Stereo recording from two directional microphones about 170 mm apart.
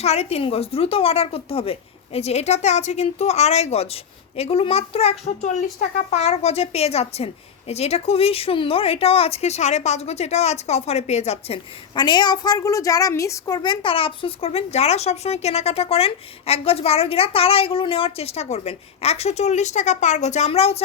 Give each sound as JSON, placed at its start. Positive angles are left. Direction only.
{"t": 0.0, "sound": "speech", "side_deg": 40}